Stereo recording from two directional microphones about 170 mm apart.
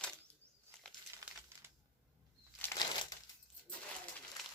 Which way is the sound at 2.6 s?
10° left (ahead or behind).